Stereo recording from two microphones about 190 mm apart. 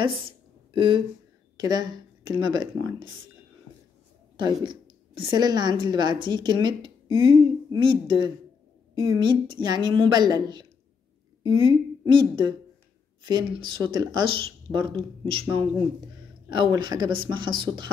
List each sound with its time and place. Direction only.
0.7 s speech: 25° right (ahead or behind)
4.4 s a woman's voice: 25° right (ahead or behind)
16.4 s speech: 25° right (ahead or behind)